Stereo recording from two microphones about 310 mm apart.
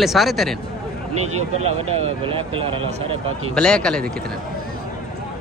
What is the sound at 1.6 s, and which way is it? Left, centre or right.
Speech, centre.